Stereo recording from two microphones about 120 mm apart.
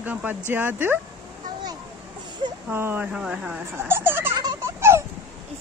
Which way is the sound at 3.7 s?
20° right (ahead or behind).